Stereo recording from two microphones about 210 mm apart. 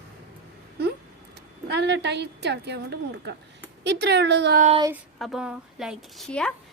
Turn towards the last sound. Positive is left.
turn(degrees=5)  # may be behind; listen again after turning